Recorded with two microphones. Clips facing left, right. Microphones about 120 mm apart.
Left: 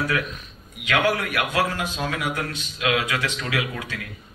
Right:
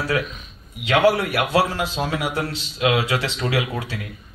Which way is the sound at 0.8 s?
30° right (ahead or behind).